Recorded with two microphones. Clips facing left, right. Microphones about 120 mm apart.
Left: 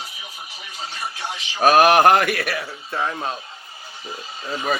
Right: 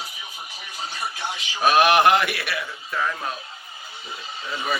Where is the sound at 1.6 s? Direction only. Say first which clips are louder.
Left 3 dB; 40° left (ahead or behind).